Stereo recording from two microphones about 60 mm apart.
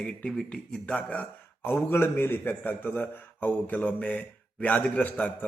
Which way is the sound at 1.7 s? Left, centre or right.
Left.